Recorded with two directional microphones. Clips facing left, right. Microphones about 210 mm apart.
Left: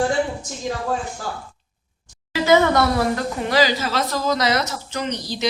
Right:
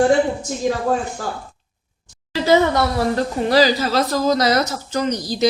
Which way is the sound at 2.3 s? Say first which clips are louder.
Right 1 dB; 35° right (ahead or behind).